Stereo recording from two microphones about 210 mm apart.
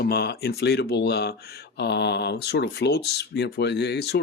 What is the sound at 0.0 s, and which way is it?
Speech, 45° left (ahead or behind).